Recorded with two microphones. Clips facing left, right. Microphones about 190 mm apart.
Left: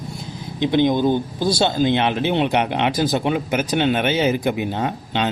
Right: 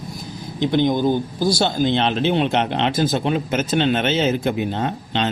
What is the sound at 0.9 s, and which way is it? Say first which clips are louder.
Speech: left 1 dB; 10° right (ahead or behind).